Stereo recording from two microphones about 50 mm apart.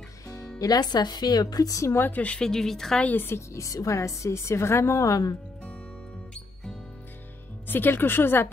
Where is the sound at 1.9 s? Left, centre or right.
Left.